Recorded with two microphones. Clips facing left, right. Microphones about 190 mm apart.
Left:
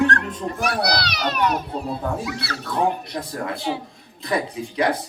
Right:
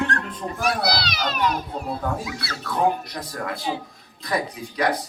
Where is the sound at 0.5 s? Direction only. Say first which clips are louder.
Even; 65° left (ahead or behind).